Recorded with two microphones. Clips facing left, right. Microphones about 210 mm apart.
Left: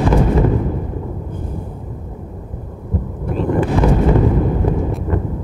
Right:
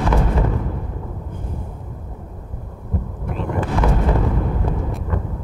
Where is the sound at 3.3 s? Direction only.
35° left (ahead or behind).